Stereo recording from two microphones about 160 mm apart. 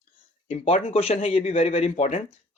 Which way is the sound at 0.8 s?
35° left (ahead or behind).